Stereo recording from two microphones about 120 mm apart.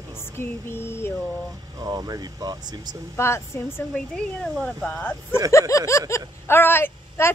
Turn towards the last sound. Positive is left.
turn(degrees=20)  # may be behind; listen again after turning